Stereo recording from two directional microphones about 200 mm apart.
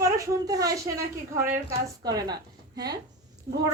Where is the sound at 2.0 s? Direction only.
20° right (ahead or behind).